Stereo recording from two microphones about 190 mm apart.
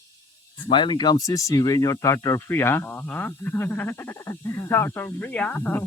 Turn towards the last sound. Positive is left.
turn(degrees=10)  # may be behind; listen again after turning